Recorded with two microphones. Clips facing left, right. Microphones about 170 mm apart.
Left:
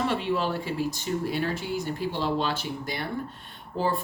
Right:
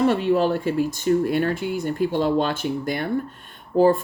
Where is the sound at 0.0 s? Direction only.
45° right (ahead or behind).